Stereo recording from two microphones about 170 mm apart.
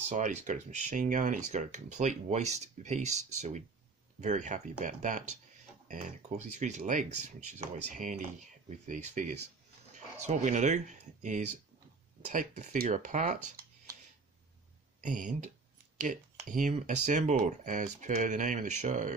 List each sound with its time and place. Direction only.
0.0 s speech: 45° right (ahead or behind)
15.0 s speech: 50° right (ahead or behind)